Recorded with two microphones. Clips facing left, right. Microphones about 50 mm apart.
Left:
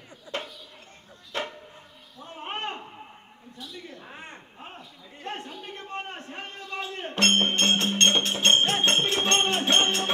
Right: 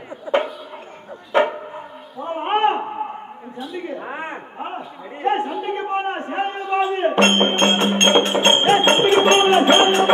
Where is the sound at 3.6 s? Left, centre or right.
Right.